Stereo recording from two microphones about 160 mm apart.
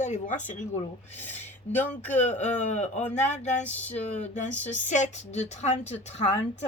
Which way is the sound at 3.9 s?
45° left (ahead or behind).